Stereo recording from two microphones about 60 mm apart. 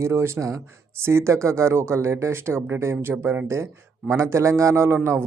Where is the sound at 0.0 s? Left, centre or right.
Right.